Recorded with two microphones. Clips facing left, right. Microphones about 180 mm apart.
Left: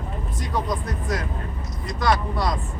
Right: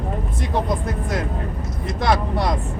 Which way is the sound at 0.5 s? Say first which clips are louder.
Right 3 dB; 25° right (ahead or behind).